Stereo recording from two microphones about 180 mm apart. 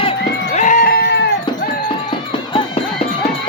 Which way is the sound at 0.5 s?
45° left (ahead or behind).